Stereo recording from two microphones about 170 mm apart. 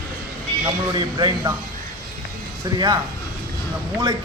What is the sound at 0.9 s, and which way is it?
Speech, 25° right (ahead or behind).